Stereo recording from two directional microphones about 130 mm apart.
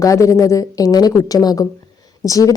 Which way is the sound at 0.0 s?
25° left (ahead or behind).